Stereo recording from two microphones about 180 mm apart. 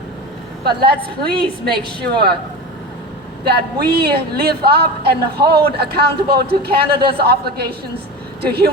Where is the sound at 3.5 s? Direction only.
60° right (ahead or behind).